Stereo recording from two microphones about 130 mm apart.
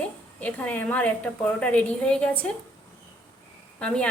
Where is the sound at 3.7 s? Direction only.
5° left (ahead or behind).